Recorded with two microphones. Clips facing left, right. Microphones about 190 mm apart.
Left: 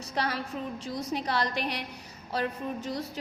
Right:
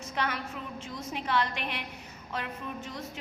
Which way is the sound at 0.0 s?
35° left (ahead or behind).